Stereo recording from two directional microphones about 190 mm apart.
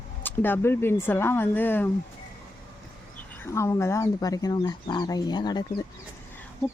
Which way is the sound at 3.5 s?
15° left (ahead or behind).